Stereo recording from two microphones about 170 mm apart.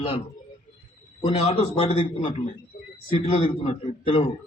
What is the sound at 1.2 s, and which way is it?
A man's voice, 35° left (ahead or behind).